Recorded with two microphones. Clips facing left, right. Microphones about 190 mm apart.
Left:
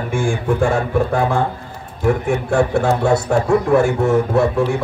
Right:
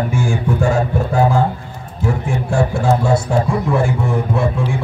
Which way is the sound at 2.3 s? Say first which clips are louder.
Left 1 dB; 65° left (ahead or behind).